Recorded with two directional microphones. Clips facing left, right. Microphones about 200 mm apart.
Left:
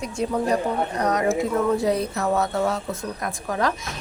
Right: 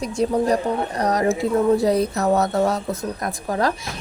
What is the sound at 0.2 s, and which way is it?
Speech, 35° right (ahead or behind).